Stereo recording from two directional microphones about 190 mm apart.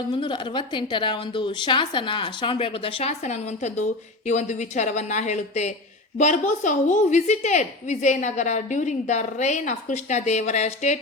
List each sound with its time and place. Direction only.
0.1 s a woman's voice: 25° left (ahead or behind)